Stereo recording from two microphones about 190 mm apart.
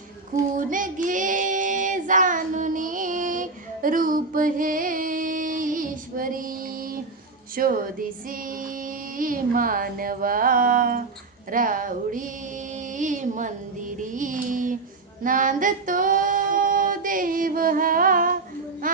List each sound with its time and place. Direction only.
0.5 s child singing: 45° right (ahead or behind)
7.5 s female singing: 50° right (ahead or behind)